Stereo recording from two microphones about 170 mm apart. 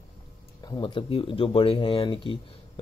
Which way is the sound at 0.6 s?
25° left (ahead or behind).